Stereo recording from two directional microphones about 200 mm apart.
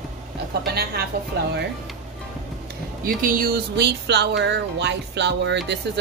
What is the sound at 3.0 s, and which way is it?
Music, 45° right (ahead or behind).